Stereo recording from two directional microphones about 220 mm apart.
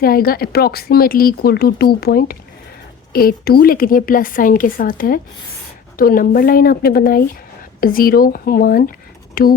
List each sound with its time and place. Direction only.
0.0 s a woman's voice: 45° left (ahead or behind)